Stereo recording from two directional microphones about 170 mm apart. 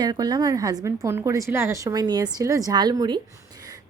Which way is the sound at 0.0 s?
25° right (ahead or behind).